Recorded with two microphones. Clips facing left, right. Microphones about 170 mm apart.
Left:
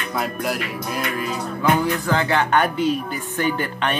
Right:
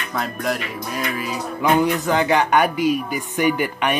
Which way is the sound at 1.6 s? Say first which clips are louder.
Right 2 dB; 15° right (ahead or behind).